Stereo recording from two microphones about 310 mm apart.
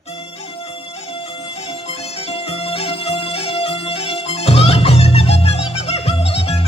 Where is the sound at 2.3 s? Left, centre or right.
Centre.